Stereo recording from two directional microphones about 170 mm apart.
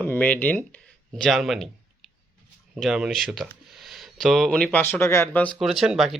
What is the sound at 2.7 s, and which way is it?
Speech, 5° right (ahead or behind).